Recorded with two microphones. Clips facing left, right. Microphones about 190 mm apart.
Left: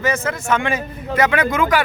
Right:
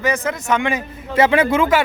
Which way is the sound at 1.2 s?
30° right (ahead or behind).